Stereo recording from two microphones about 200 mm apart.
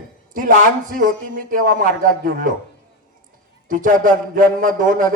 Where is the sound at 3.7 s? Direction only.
40° right (ahead or behind).